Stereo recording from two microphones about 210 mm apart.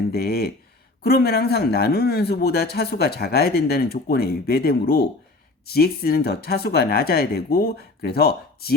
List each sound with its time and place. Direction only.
0.1 s speech: 45° left (ahead or behind)